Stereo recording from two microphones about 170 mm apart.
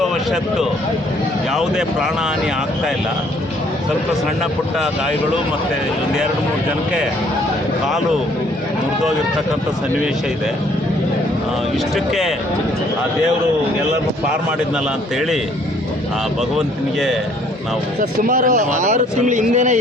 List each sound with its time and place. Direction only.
0.0 s a sound: centre (ahead or behind)
1.5 s speech: 5° right (ahead or behind)
11.9 s speech: centre (ahead or behind)
16.6 s speech: 5° right (ahead or behind)
18.2 s speech: 50° right (ahead or behind)